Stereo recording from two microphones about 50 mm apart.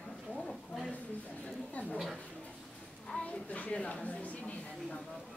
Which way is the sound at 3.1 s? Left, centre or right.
Left.